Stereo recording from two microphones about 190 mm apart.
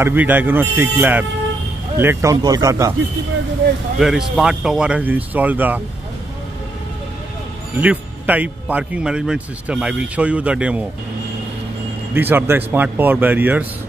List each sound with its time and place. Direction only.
0.0 s a man's voice: 10° right (ahead or behind)
4.0 s speech: centre (ahead or behind)
7.7 s a man's voice: 10° right (ahead or behind)
12.1 s a man's voice: 10° right (ahead or behind)